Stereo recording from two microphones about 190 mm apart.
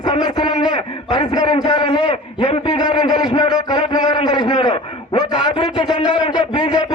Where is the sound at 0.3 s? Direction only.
20° left (ahead or behind).